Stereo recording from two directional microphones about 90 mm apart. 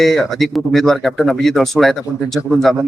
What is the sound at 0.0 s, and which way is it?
Speech, centre (ahead or behind).